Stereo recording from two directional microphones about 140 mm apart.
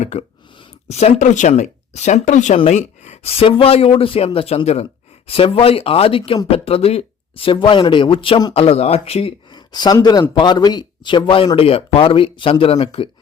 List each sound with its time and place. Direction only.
0.0 s speech: 50° left (ahead or behind); by 8.5 s 35° left (ahead or behind)
8.5 s speech: 45° left (ahead or behind)
9.6 s speech: 30° left (ahead or behind)